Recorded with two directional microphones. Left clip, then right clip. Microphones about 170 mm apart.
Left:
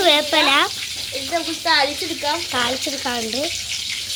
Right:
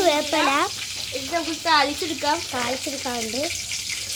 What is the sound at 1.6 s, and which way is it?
Speech, 40° right (ahead or behind).